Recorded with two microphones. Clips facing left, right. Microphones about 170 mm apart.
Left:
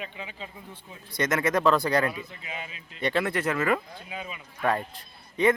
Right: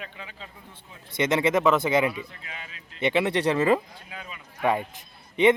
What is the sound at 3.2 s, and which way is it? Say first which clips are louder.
Speech: right 4 dB; 30° right (ahead or behind).